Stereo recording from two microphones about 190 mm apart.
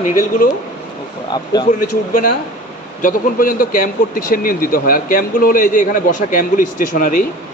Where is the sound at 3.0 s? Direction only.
45° left (ahead or behind).